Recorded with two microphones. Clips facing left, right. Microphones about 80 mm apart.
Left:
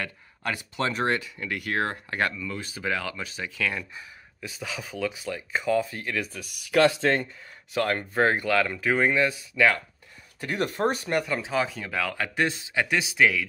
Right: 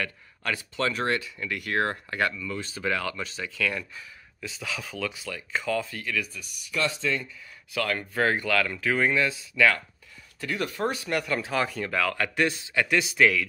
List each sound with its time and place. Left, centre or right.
0.0 s speech: left
2.3 s speech: centre; by 6.2 s left
6.6 s speech: left
7.7 s speech: left
8.0 s speech: left
11.2 s speech: centre